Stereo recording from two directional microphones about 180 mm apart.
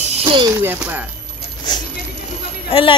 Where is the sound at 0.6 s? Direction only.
10° right (ahead or behind).